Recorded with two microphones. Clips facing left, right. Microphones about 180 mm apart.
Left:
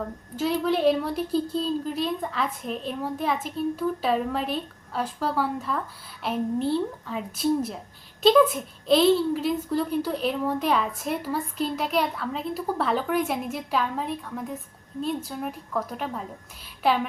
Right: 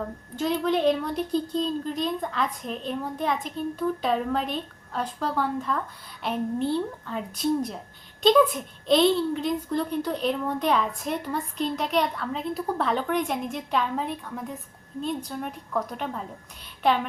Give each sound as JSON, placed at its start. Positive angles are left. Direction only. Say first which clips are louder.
{"t": 0.3, "sound": "a woman's voice", "louder": "even", "side_deg": 5}